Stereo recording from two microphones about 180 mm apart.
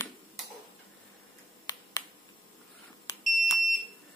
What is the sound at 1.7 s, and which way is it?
Finger snapping, 20° left (ahead or behind).